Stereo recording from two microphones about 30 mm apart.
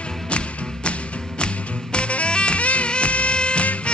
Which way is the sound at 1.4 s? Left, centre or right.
Left.